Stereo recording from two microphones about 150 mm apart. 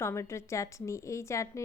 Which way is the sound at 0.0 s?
20° left (ahead or behind).